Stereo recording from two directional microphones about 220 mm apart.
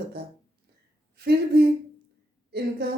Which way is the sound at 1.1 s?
45° right (ahead or behind).